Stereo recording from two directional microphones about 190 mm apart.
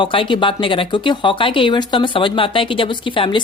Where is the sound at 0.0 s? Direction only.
25° left (ahead or behind).